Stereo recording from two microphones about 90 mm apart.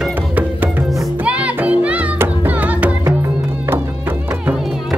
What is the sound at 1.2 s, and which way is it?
Music, 15° right (ahead or behind).